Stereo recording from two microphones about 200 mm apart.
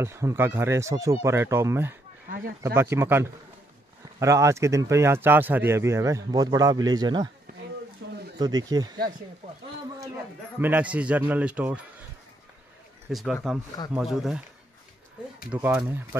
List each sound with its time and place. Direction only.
0.0 s speech: 15° right (ahead or behind)
2.2 s a sound: 45° right (ahead or behind)
2.6 s speech: 15° right (ahead or behind)
8.0 s a sound: 60° right (ahead or behind)
8.4 s speech: 20° right (ahead or behind)
10.6 s speech: 5° right (ahead or behind)
13.1 s speech: centre (ahead or behind)
15.5 s speech: 5° right (ahead or behind)